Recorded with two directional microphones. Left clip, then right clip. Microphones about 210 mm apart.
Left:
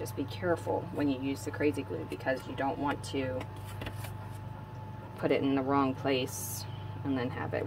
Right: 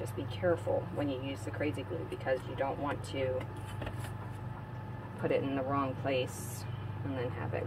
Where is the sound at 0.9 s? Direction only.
70° left (ahead or behind).